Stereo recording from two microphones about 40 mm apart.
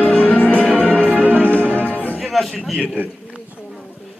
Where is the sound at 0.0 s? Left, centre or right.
Left.